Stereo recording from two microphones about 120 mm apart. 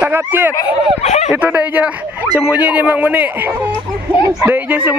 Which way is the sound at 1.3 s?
10° right (ahead or behind).